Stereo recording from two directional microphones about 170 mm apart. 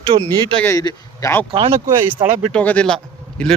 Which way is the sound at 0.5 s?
15° left (ahead or behind).